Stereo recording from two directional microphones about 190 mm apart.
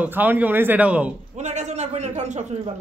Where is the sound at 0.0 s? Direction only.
10° right (ahead or behind).